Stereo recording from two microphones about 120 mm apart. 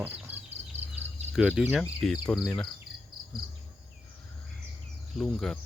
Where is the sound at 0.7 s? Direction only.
15° right (ahead or behind).